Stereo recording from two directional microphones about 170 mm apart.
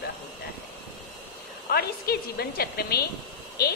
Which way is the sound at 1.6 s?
65° left (ahead or behind).